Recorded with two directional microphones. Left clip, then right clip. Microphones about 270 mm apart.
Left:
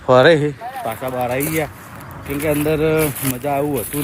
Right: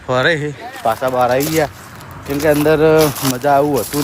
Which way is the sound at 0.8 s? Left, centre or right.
Centre.